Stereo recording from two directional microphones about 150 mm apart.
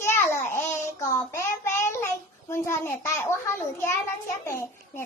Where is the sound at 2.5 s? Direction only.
15° left (ahead or behind).